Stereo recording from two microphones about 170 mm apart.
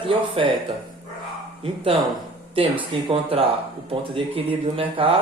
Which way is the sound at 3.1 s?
35° right (ahead or behind).